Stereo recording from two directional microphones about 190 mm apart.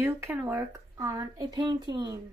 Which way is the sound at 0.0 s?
10° right (ahead or behind).